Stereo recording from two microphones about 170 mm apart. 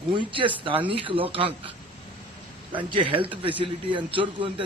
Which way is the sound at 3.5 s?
30° right (ahead or behind).